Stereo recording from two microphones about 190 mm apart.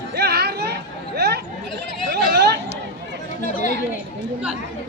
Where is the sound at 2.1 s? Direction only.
60° right (ahead or behind).